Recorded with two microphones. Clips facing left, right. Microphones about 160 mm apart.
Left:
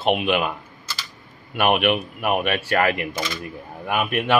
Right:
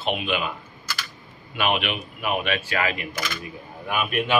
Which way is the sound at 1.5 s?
55° left (ahead or behind).